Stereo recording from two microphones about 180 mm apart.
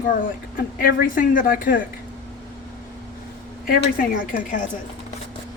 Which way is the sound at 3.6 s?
55° left (ahead or behind).